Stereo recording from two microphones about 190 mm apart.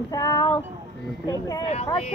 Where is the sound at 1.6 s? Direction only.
35° left (ahead or behind).